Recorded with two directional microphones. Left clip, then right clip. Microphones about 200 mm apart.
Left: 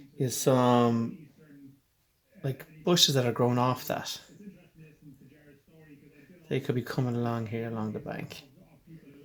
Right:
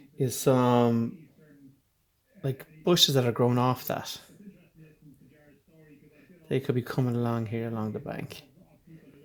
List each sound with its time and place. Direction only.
0.2 s speech: 45° right (ahead or behind)
2.4 s speech: 45° right (ahead or behind)
6.5 s speech: 45° right (ahead or behind)